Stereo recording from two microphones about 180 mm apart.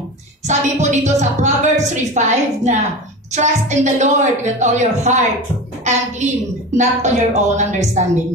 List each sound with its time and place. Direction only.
0.5 s a woman's voice: 40° right (ahead or behind)